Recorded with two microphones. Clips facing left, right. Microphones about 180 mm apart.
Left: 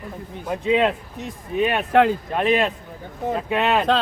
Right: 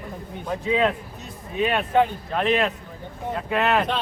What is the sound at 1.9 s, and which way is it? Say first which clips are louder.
Speech: left 5 dB; 80° left.